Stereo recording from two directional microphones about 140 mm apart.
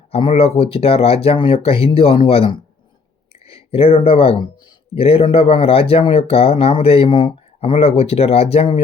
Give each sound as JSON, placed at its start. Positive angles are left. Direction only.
{"t": 0.1, "sound": "speech", "side_deg": 40}